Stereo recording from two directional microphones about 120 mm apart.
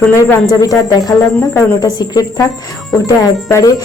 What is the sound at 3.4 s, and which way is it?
Music, 25° left (ahead or behind).